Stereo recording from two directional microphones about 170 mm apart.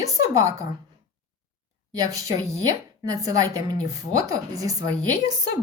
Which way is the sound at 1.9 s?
20° right (ahead or behind).